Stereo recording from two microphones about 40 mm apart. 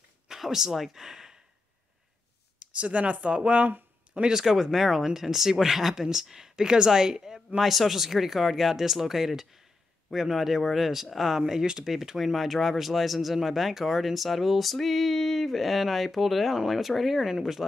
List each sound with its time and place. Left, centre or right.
0.3 s a sound: centre
0.7 s speech: centre
2.6 s speech: right
4.3 s speech: centre